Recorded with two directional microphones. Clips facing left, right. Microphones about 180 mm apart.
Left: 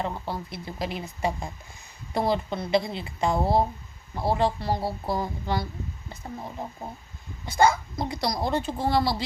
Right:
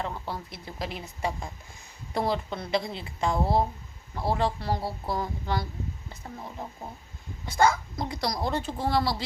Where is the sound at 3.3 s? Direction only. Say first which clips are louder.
Left 2 dB; 25° left (ahead or behind).